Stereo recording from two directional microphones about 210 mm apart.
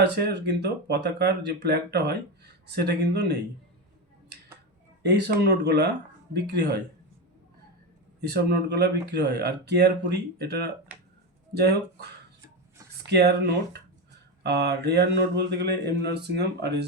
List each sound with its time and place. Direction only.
0.0 s speech: 50° right (ahead or behind)
5.0 s speech: 55° right (ahead or behind)
8.3 s speech: 50° right (ahead or behind)
13.1 s speech: 50° right (ahead or behind)
14.4 s speech: 50° right (ahead or behind)